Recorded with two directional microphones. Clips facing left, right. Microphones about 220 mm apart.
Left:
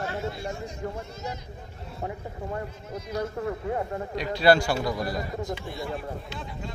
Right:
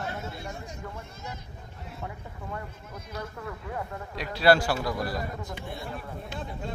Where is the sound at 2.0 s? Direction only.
30° left (ahead or behind).